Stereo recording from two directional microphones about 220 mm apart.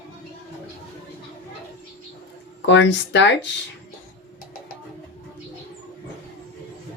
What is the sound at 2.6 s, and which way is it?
Speech, 55° left (ahead or behind).